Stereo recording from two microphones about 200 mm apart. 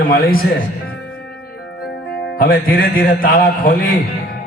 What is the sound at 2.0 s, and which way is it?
A man's voice, 50° left (ahead or behind).